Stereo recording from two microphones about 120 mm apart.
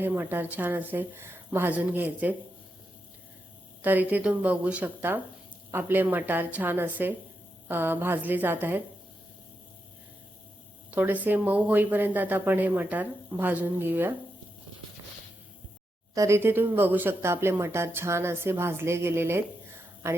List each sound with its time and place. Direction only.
0.0 s speech: 15° right (ahead or behind)
3.8 s speech: 15° right (ahead or behind)
10.9 s speech: 15° right (ahead or behind)
16.1 s speech: 25° right (ahead or behind)